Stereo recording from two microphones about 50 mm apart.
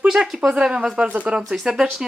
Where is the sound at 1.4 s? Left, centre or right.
Centre.